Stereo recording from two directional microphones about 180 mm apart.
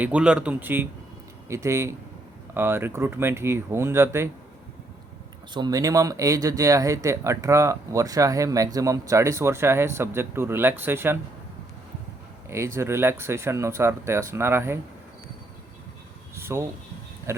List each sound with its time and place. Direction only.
0.0 s speech: 5° right (ahead or behind)
5.5 s speech: 20° right (ahead or behind)
12.5 s speech: 15° right (ahead or behind)
16.3 s a sound: 15° right (ahead or behind)
17.3 s insect: 15° right (ahead or behind)